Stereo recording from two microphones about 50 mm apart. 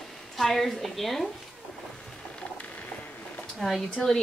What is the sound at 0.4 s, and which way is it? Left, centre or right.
Speech, centre.